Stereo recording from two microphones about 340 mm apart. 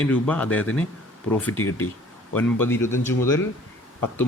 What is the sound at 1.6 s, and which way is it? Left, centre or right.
Speech, left.